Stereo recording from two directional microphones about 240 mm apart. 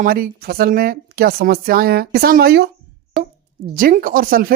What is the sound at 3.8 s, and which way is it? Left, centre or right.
Speech, right.